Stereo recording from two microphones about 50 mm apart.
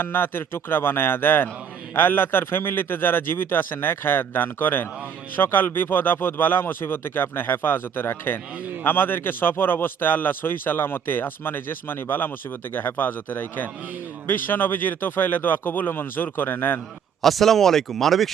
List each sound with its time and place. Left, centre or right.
0.0 s speech: left
17.2 s speech: centre